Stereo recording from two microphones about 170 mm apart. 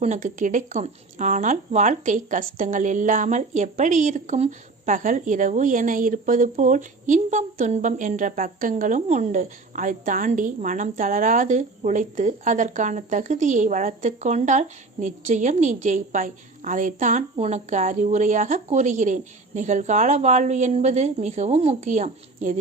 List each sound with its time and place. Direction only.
0.0 s a woman's voice: 45° right (ahead or behind)